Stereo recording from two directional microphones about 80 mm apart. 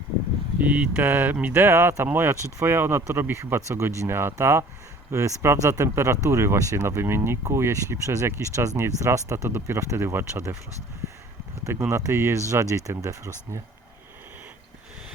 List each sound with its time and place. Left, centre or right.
0.6 s speech: centre; by 10.6 s right
11.7 s speech: right